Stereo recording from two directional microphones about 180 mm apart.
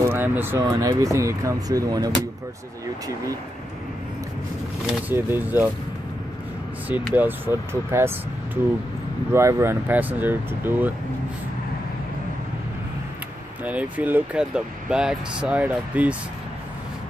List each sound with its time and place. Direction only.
0.0 s speech: 10° right (ahead or behind)
4.8 s speech: 10° right (ahead or behind)
6.9 s speech: 10° right (ahead or behind)
9.3 s speech: 15° right (ahead or behind)
13.7 s speech: 10° right (ahead or behind)